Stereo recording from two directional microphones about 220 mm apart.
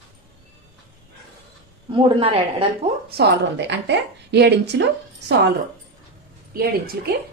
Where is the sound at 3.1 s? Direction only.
50° right (ahead or behind).